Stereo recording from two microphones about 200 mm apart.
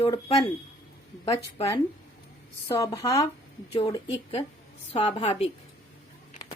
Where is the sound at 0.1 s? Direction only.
20° left (ahead or behind).